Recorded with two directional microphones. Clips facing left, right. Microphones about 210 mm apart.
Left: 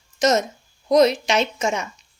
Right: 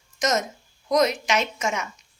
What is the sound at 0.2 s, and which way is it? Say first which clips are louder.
A woman's voice: left 5 dB; 30° left (ahead or behind).